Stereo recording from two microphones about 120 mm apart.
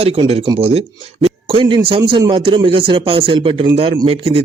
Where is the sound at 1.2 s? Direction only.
50° right (ahead or behind).